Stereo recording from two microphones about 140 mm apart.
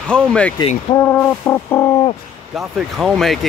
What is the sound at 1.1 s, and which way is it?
Music, 20° left (ahead or behind).